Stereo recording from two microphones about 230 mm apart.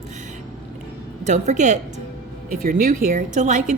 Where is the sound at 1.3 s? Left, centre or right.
Right.